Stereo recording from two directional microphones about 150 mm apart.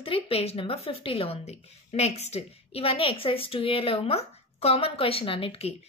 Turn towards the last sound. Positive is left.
turn(degrees=40)  # may be behind; listen again after turning